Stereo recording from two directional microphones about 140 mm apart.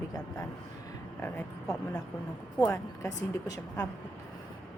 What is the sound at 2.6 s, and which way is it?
A woman's voice, 20° left (ahead or behind).